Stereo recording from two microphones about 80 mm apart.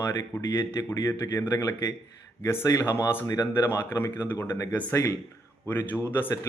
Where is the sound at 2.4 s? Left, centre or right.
Left.